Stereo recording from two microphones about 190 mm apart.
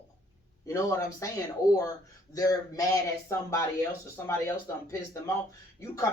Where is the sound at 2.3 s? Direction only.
20° left (ahead or behind).